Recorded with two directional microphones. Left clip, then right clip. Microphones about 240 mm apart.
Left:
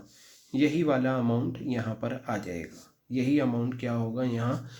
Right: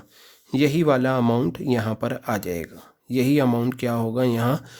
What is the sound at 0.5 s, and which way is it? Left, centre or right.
Speech, right.